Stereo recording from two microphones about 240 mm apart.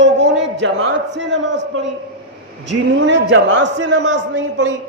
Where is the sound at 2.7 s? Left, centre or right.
Right.